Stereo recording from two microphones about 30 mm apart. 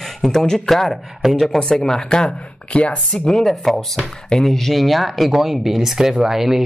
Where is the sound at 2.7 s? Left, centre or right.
Left.